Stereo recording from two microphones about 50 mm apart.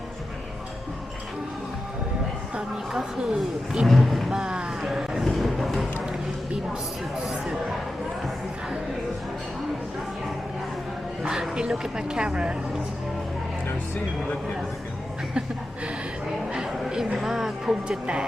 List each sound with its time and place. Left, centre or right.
2.6 s speech: centre
3.8 s a sound: centre
4.3 s a sound: centre
11.2 s speech: centre
16.5 s speech: centre
17.8 s speech: centre